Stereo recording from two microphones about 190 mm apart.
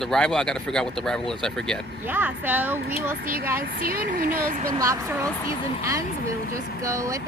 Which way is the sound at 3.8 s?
50° right (ahead or behind).